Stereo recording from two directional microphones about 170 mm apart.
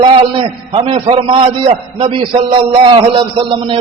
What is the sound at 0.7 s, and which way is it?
A man's voice, 35° right (ahead or behind).